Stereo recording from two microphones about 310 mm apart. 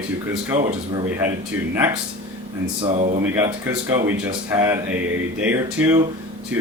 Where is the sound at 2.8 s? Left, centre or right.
Right.